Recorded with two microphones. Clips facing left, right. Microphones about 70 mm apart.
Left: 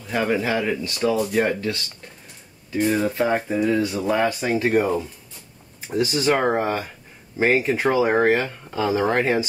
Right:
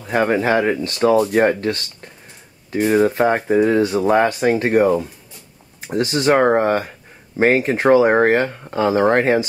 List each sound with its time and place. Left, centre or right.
0.0 s speech: right
5.9 s speech: right
6.3 s speech: right